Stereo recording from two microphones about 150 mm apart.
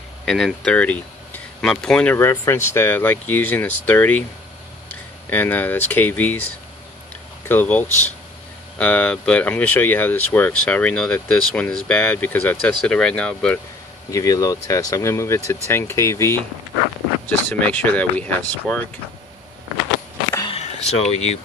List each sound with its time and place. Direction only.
0.2 s speech: centre (ahead or behind)
5.3 s speech: 10° left (ahead or behind)
7.4 s speech: 10° left (ahead or behind)
14.1 s speech: 20° left (ahead or behind)
20.5 s speech: 45° left (ahead or behind)